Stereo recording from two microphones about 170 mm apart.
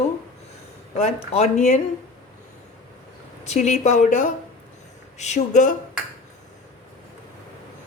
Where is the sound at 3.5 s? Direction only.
40° left (ahead or behind).